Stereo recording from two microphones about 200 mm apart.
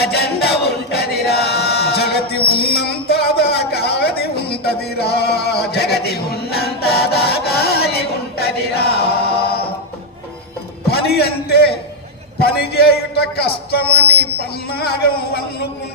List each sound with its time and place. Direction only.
0.0 s chant: 55° left (ahead or behind)
4.6 s a sound: 50° left (ahead or behind)
9.4 s music: 50° left (ahead or behind)
10.9 s a man's voice: 50° left (ahead or behind)